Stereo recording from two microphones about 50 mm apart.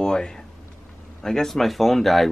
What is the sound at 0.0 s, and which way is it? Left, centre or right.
Speech, centre.